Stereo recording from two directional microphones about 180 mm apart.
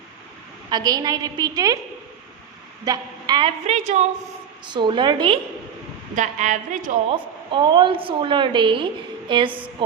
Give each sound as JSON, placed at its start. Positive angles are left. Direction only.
{"t": 0.7, "sound": "a woman's voice", "side_deg": -20}
{"t": 2.8, "sound": "a woman's voice", "side_deg": -20}
{"t": 3.7, "sound": "a woman's voice", "side_deg": -40}
{"t": 4.6, "sound": "a woman's voice", "side_deg": -25}
{"t": 6.1, "sound": "a woman's voice", "side_deg": -40}
{"t": 7.5, "sound": "a woman's voice", "side_deg": -25}